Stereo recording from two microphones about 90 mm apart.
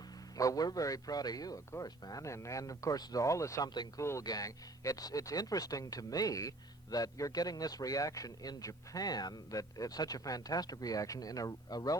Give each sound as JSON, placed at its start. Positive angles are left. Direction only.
{"t": 0.3, "sound": "a man's voice", "side_deg": 40}